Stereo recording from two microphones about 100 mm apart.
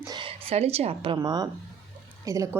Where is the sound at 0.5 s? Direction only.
90° right.